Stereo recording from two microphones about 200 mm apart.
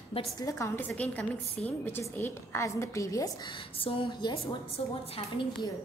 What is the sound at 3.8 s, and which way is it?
Speech, 25° left (ahead or behind).